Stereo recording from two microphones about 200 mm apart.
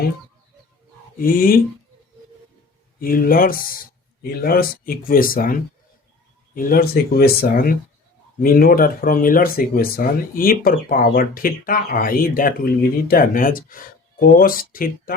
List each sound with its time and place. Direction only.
1.2 s speech: 45° left (ahead or behind)
3.0 s speech: 45° left (ahead or behind)